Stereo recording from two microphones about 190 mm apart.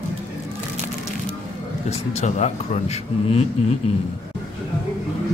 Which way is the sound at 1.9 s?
35° left (ahead or behind).